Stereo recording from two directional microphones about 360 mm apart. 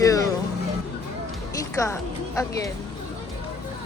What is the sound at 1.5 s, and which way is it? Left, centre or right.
Speech, centre.